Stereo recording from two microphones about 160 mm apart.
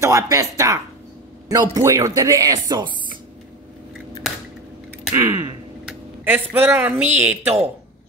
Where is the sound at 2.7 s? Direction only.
30° right (ahead or behind).